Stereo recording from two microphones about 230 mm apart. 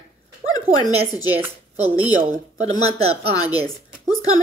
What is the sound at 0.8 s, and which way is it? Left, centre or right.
Speech, right.